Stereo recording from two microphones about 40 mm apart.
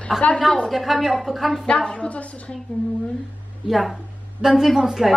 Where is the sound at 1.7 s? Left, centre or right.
Left.